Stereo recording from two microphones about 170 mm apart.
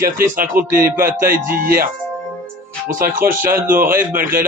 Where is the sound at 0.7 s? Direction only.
55° right (ahead or behind).